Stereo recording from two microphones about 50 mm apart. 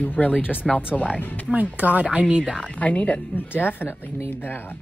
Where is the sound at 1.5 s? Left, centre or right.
Right.